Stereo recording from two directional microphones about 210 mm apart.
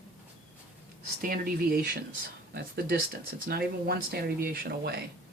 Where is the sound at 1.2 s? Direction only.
45° right (ahead or behind).